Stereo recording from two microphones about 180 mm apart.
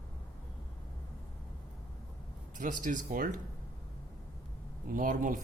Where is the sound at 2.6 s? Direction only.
45° right (ahead or behind).